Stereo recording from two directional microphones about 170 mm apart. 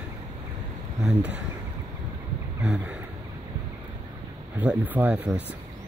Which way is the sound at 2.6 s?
5° right (ahead or behind).